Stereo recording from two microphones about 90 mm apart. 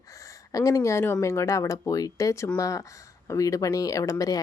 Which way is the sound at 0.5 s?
40° left (ahead or behind).